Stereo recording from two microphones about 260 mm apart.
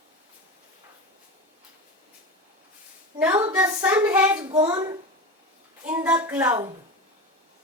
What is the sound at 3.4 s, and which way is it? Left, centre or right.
Speech, centre.